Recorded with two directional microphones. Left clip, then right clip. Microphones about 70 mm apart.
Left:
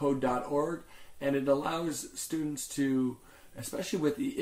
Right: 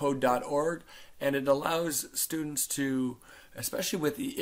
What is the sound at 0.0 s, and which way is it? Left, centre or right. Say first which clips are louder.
Speech: right 3 dB; right.